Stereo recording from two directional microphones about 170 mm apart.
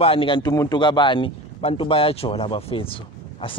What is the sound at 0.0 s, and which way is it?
A man's voice, 30° left (ahead or behind).